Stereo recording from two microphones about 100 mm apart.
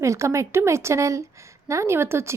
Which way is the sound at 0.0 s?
30° right (ahead or behind).